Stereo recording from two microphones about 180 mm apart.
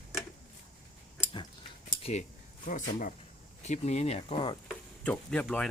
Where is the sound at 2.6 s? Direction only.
50° left (ahead or behind); by 4.6 s 25° left (ahead or behind).